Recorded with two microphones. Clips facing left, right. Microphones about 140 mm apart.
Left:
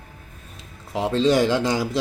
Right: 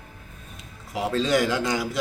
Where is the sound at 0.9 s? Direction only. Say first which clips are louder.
Left 4 dB; 30° left (ahead or behind).